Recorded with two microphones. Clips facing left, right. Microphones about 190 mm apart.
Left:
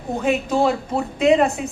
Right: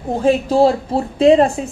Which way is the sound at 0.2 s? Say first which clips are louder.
Right 6 dB; 30° right (ahead or behind).